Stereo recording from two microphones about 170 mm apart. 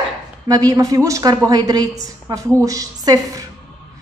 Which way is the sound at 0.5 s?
20° right (ahead or behind).